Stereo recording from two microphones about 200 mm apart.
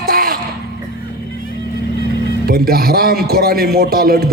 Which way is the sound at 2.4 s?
50° right (ahead or behind).